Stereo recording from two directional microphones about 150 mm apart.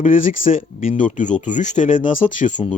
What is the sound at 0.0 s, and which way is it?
Speech, 60° left (ahead or behind).